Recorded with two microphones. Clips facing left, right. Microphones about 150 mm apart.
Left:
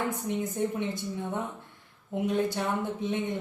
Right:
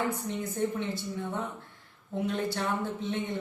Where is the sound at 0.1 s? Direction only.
15° left (ahead or behind).